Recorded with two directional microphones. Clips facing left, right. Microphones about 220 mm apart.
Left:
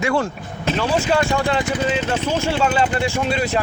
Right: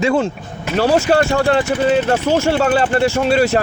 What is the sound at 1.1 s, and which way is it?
Speech, 55° right (ahead or behind).